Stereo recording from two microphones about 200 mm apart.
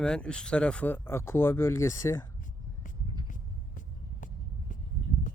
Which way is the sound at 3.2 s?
40° left (ahead or behind).